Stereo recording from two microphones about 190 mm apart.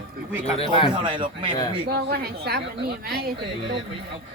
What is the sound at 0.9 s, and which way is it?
Speech, 25° right (ahead or behind).